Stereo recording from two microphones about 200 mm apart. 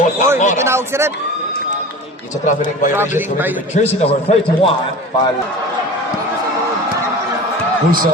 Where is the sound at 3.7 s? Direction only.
30° left (ahead or behind).